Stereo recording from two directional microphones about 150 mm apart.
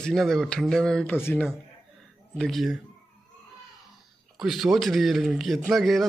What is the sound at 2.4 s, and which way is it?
Speech, centre (ahead or behind).